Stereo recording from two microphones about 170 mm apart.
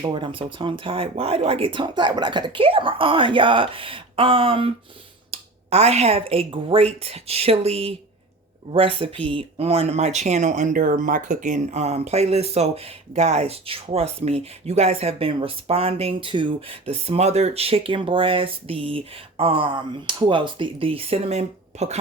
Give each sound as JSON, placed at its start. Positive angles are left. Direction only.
{"t": 0.0, "sound": "speech", "side_deg": -30}